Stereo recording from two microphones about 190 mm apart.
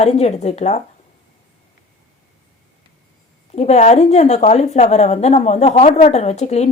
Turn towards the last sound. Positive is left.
turn(degrees=35)  # may be behind; listen again after turning